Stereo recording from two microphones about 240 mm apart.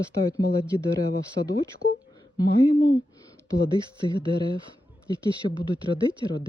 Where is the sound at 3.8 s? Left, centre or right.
Centre.